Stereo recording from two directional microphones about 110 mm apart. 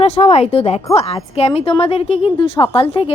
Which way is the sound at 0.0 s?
75° left (ahead or behind).